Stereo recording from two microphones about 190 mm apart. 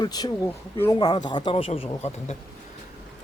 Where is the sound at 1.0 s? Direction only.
20° left (ahead or behind).